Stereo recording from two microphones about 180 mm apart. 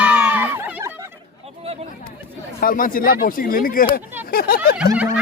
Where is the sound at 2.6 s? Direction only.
50° left (ahead or behind).